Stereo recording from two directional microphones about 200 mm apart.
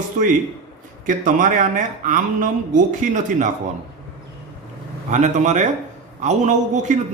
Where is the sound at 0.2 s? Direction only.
40° right (ahead or behind).